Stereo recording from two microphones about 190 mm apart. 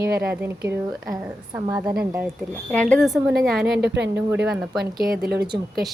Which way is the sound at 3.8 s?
65° right (ahead or behind).